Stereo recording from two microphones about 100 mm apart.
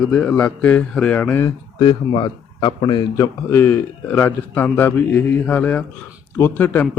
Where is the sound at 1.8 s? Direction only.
50° left (ahead or behind).